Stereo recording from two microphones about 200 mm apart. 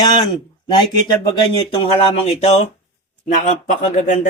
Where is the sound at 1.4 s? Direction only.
25° left (ahead or behind).